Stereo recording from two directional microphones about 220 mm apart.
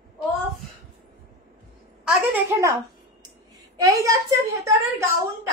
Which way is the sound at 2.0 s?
10° right (ahead or behind).